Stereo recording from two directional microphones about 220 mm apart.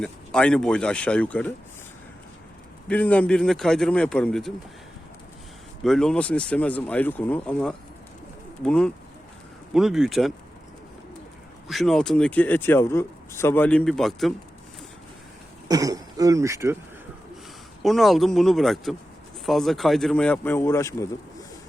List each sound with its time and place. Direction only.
0.0 s speech: 5° left (ahead or behind)
2.9 s speech: 5° left (ahead or behind)
5.8 s speech: centre (ahead or behind)
11.7 s speech: centre (ahead or behind)
15.7 s speech: 15° right (ahead or behind)
17.8 s speech: centre (ahead or behind)